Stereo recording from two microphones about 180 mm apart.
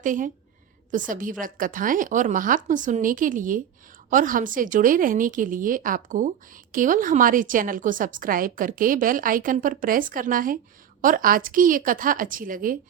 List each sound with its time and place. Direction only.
0.0 s a woman's voice: 45° right (ahead or behind)